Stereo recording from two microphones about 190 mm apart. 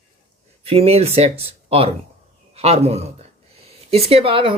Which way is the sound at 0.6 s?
30° right (ahead or behind).